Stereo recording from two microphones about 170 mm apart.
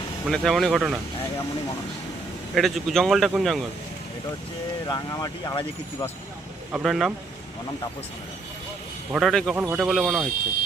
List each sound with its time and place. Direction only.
0.3 s a man's voice: centre (ahead or behind)
2.6 s a man's voice: centre (ahead or behind)
4.9 s speech: 25° left (ahead or behind)
6.7 s a man's voice: 5° right (ahead or behind)
9.1 s a man's voice: centre (ahead or behind)